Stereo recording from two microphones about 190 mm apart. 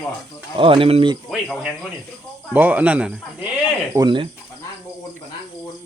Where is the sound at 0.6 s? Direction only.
30° right (ahead or behind).